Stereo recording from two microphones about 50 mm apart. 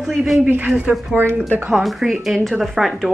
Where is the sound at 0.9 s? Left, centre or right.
Right.